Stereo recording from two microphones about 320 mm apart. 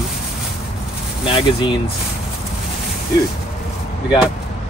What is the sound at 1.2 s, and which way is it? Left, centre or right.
Speech, centre.